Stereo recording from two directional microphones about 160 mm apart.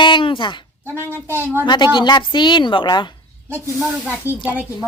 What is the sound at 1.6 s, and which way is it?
A woman's voice, 30° left (ahead or behind).